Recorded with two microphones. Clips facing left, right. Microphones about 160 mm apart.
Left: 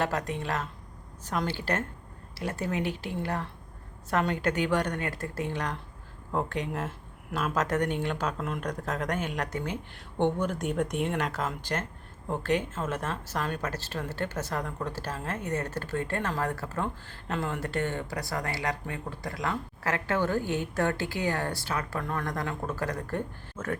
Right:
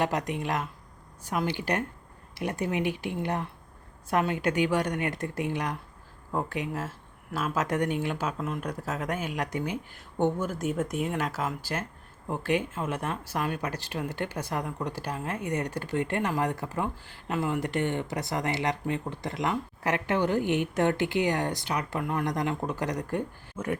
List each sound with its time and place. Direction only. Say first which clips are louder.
0.0 s speech: right 2 dB; 15° right (ahead or behind)